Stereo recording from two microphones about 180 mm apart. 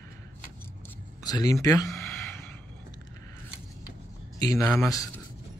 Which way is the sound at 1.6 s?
15° left (ahead or behind).